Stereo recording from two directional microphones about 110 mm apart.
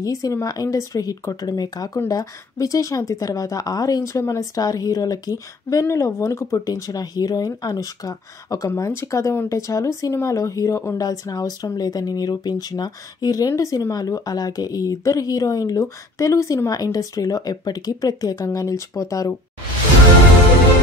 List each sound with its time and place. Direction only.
0.0 s speech: 30° left (ahead or behind)